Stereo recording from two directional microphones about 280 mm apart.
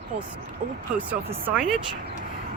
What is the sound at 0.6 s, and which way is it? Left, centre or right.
Speech, right.